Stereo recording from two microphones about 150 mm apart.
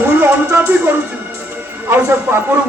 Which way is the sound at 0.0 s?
15° right (ahead or behind).